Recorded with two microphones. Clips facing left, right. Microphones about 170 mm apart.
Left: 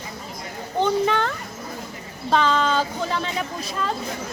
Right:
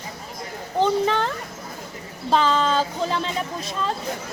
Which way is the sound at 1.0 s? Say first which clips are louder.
Even; centre (ahead or behind).